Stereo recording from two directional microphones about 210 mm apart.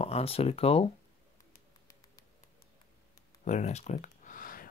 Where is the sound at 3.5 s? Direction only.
35° left (ahead or behind).